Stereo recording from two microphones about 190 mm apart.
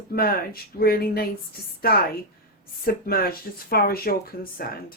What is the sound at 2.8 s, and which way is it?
Speech, 50° left (ahead or behind).